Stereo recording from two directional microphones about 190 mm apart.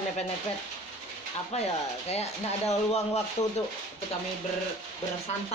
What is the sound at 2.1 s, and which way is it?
Speech, 35° left (ahead or behind).